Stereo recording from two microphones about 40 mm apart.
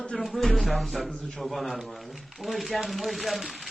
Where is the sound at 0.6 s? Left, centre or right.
Centre.